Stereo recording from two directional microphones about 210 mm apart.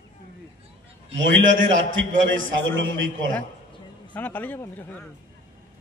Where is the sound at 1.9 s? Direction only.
65° right (ahead or behind).